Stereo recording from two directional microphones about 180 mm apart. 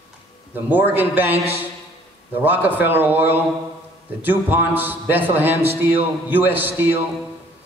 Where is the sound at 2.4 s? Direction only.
10° right (ahead or behind).